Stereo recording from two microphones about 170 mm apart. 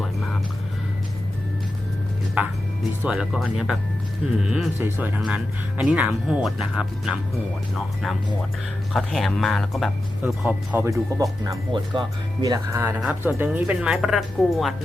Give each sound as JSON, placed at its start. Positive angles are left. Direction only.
{"t": 2.4, "sound": "speech", "side_deg": -10}
{"t": 8.9, "sound": "speech", "side_deg": 0}
{"t": 13.0, "sound": "speech", "side_deg": -10}